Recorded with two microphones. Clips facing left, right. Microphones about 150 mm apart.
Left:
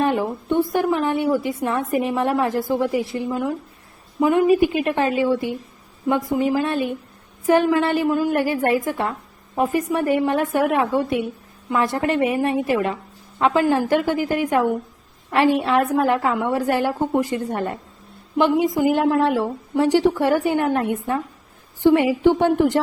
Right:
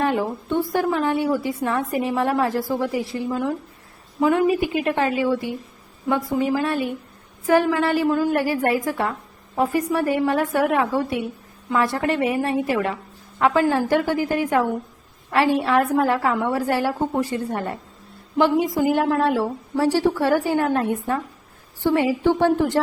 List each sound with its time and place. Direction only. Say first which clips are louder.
0.0 s a woman's voice: left 1 dB; 20° left (ahead or behind)